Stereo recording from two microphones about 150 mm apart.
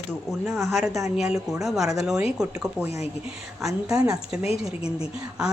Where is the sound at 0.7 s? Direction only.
Centre (ahead or behind).